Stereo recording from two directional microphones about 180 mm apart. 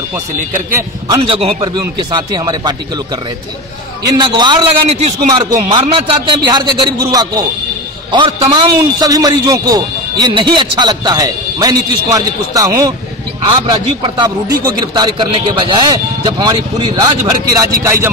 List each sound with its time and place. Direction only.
0.6 s a man's voice: 15° right (ahead or behind)
1.0 s a man's voice: 25° right (ahead or behind)
4.0 s a man's voice: 25° right (ahead or behind)
5.7 s a man's voice: 25° right (ahead or behind)